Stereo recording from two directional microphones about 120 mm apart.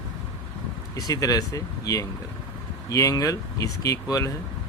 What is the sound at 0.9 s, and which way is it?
Speech, 30° left (ahead or behind).